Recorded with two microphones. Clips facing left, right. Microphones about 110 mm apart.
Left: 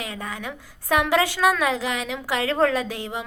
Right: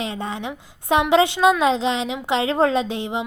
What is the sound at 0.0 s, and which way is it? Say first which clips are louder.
A woman's voice: right 5 dB; 25° right (ahead or behind).